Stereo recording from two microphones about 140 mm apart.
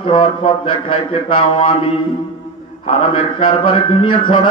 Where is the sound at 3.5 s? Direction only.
40° left (ahead or behind).